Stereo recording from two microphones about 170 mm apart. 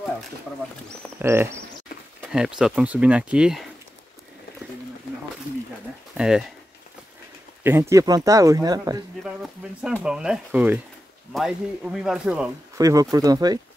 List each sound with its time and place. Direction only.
1.2 s speech: 15° right (ahead or behind)
2.3 s speech: 5° right (ahead or behind)
6.1 s speech: 5° right (ahead or behind)
7.6 s speech: 15° right (ahead or behind)
9.2 s speech: 5° right (ahead or behind)
12.7 s speech: 20° right (ahead or behind)